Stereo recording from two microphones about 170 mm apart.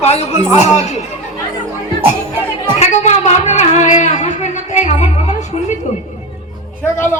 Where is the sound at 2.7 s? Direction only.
40° left (ahead or behind).